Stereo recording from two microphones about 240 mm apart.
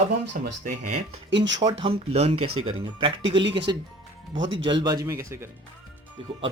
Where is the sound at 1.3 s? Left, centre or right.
Right.